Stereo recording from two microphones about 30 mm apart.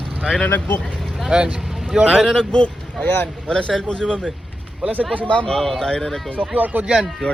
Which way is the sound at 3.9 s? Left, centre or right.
Left.